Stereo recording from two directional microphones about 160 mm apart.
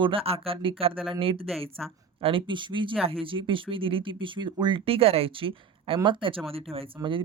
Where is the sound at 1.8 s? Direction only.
Centre (ahead or behind).